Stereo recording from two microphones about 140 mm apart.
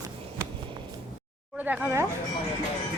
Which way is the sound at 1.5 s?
10° right (ahead or behind).